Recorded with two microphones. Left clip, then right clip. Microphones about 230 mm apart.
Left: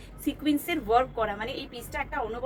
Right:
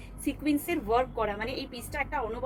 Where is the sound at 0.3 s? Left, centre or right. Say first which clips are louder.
Left 2 dB; centre.